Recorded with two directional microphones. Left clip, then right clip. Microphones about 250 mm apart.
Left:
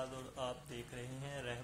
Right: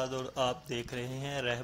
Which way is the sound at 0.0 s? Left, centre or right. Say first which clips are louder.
Right 11 dB; right.